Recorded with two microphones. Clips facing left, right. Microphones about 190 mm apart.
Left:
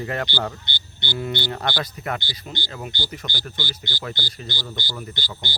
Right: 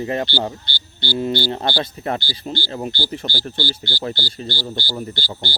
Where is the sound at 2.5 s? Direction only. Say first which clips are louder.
Right 7 dB; 20° left (ahead or behind).